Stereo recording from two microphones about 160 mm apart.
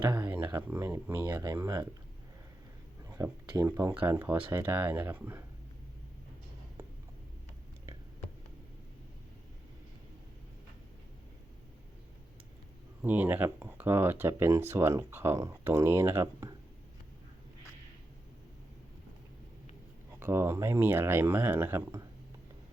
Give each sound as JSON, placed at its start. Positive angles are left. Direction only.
{"t": 0.2, "sound": "speech", "side_deg": -10}
{"t": 3.1, "sound": "speech", "side_deg": -15}
{"t": 13.0, "sound": "speech", "side_deg": -10}
{"t": 20.1, "sound": "speech", "side_deg": -15}